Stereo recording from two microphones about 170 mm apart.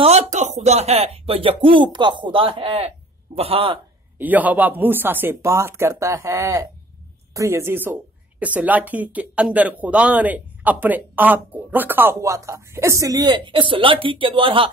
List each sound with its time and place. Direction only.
0.0 s speech: 40° right (ahead or behind)
4.2 s a woman's voice: 10° right (ahead or behind); by 14.7 s 30° right (ahead or behind)